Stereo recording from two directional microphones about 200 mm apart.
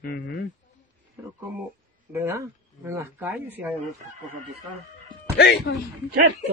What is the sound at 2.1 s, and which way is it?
Insect, 15° right (ahead or behind).